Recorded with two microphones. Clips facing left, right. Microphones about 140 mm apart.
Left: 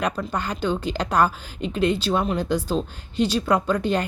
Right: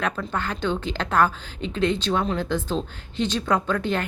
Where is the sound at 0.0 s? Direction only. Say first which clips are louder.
Left 1 dB; 15° left (ahead or behind).